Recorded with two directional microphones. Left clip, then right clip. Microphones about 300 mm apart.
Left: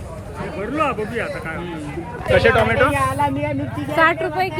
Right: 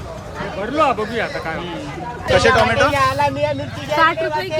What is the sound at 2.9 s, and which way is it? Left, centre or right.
Speech, right.